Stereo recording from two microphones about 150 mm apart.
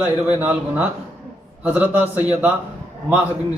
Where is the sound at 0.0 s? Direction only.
15° right (ahead or behind).